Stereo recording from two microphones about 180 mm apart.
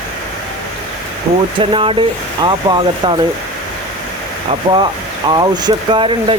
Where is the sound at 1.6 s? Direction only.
30° right (ahead or behind).